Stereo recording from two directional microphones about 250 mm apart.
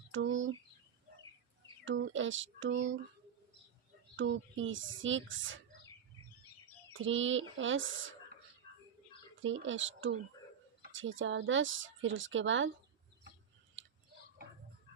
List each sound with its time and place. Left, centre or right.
0.1 s speech: right
1.8 s speech: right
4.2 s speech: right
7.0 s speech: right
9.4 s speech: right
13.8 s chewing: right